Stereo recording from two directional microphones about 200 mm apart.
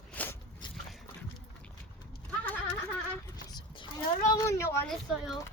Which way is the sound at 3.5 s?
20° left (ahead or behind).